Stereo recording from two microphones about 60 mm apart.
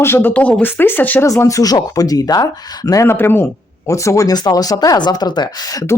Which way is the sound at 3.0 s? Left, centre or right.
Left.